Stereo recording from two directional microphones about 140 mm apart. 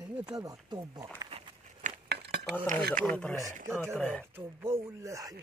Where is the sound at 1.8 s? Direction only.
65° right (ahead or behind).